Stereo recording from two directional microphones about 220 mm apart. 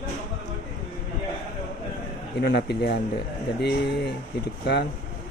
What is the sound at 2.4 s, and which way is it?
Speech, 50° left (ahead or behind).